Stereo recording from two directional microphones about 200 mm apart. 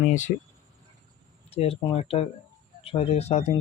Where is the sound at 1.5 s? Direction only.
30° left (ahead or behind).